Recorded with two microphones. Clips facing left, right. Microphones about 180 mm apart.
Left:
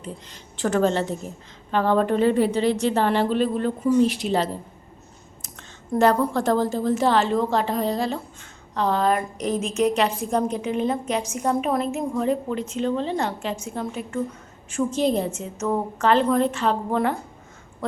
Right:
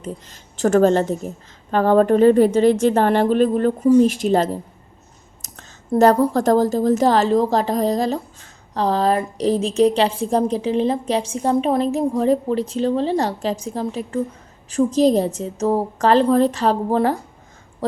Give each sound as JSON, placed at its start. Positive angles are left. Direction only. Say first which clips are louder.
{"t": 0.0, "sound": "a woman's voice", "louder": "right 5 dB", "side_deg": -45}